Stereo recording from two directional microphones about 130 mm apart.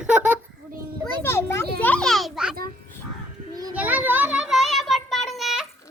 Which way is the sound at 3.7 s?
10° right (ahead or behind).